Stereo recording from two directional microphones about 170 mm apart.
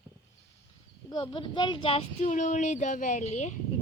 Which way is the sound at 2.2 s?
45° left (ahead or behind).